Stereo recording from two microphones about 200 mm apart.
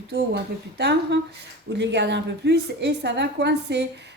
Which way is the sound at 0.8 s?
60° right (ahead or behind).